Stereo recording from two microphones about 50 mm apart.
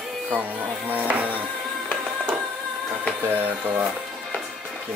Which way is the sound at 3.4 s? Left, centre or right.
Right.